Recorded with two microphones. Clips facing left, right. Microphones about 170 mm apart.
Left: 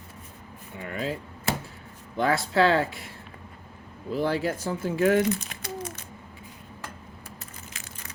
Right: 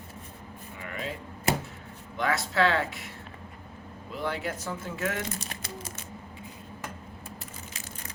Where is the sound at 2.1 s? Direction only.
35° left (ahead or behind).